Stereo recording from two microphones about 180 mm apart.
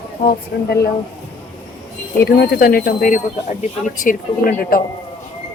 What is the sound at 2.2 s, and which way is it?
A woman's voice, 65° left (ahead or behind).